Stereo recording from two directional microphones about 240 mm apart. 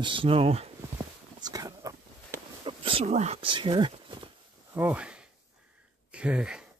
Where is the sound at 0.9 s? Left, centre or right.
Centre.